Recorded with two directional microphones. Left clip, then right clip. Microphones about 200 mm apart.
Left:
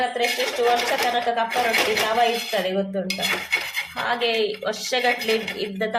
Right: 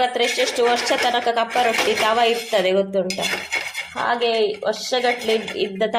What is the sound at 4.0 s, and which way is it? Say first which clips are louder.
A woman's voice: right 4 dB; 20° right (ahead or behind).